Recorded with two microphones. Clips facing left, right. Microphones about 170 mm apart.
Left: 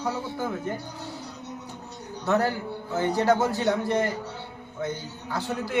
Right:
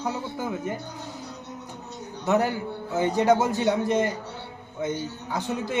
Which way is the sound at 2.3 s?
15° right (ahead or behind).